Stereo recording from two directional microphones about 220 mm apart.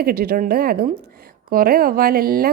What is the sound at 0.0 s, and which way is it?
A woman's voice, 45° right (ahead or behind).